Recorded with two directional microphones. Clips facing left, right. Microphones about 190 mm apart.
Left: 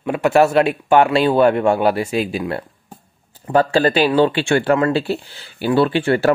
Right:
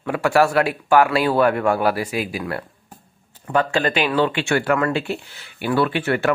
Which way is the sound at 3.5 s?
35° left (ahead or behind).